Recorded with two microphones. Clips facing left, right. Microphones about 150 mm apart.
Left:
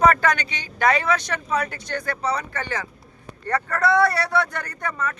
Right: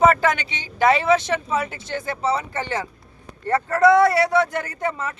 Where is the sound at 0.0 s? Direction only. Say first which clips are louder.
Right 1 dB; 20° right (ahead or behind).